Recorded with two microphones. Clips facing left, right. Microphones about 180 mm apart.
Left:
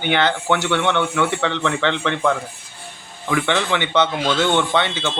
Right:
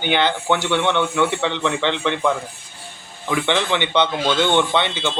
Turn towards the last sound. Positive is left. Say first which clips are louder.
# even
turn(degrees=-20)  # may be behind; listen again after turning